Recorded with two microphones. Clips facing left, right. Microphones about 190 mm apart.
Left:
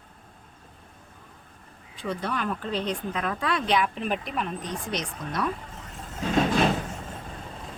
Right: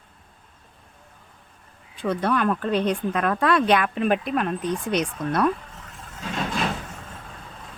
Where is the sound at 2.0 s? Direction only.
65° right (ahead or behind).